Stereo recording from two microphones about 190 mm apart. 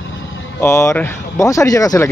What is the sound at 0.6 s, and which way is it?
Speech, 15° left (ahead or behind).